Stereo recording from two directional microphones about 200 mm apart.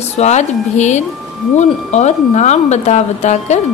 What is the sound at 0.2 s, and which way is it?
A man's voice, 35° left (ahead or behind).